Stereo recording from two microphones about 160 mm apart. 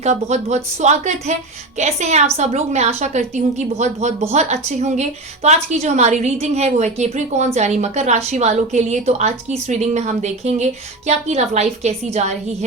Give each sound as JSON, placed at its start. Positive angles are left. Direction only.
{"t": 0.0, "sound": "a woman's voice", "side_deg": -45}